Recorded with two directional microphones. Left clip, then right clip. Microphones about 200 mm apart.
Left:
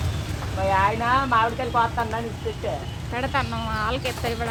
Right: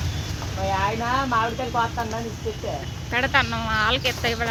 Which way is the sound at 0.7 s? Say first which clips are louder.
Left 3 dB; 20° right (ahead or behind).